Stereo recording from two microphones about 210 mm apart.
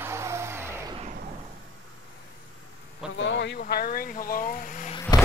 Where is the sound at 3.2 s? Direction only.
55° left (ahead or behind).